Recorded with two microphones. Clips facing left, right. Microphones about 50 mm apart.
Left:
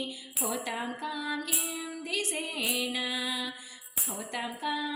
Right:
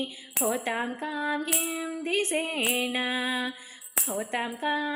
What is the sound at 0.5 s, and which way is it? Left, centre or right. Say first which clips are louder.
Music: right 4 dB; right.